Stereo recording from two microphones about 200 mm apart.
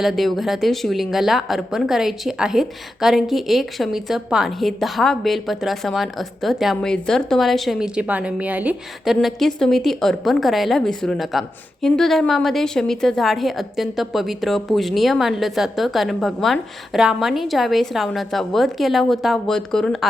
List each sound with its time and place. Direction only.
0.0 s speech: centre (ahead or behind)